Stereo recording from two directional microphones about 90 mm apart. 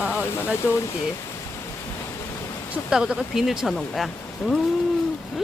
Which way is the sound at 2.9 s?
10° right (ahead or behind).